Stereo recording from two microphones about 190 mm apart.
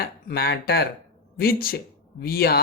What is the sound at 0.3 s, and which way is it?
A woman's voice, 55° left (ahead or behind).